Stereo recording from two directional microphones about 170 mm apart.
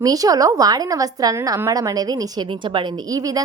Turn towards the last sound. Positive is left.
turn(degrees=-20)  # may be behind; listen again after turning